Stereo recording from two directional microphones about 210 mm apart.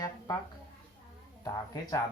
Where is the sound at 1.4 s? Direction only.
20° left (ahead or behind).